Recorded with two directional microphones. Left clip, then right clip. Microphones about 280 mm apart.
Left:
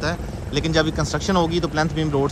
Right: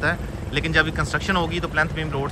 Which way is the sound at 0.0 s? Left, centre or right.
Centre.